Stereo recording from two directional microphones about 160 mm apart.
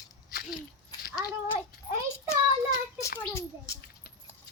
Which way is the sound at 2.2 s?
20° left (ahead or behind).